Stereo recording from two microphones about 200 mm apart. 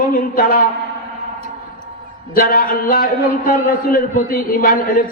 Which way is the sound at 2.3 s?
45° left (ahead or behind).